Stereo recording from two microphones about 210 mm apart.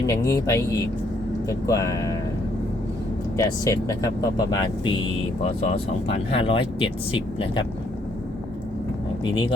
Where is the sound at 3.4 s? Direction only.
15° left (ahead or behind).